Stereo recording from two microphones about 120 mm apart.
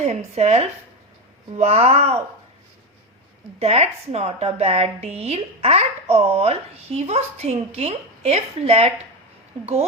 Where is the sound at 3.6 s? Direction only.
60° right (ahead or behind).